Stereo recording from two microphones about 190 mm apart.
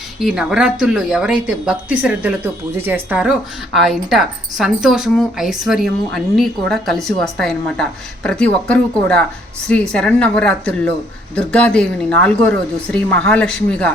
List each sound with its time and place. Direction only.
0.2 s speech: 5° right (ahead or behind)